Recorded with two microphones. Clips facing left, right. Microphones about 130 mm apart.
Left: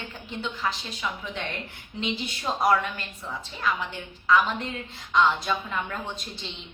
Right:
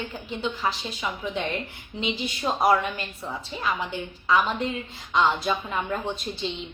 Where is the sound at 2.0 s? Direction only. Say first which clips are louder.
Right 2 dB; 5° right (ahead or behind).